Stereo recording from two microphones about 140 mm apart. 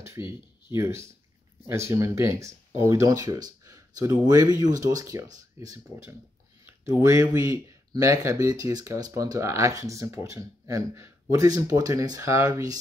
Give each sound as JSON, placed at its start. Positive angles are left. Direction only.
{"t": 0.2, "sound": "speech", "side_deg": -20}